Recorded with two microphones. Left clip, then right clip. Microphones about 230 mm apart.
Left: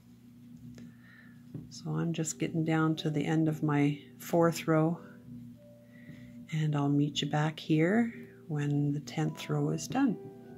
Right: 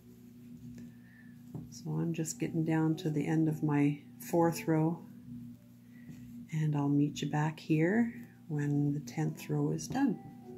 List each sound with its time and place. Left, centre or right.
1.7 s speech: left
6.5 s speech: left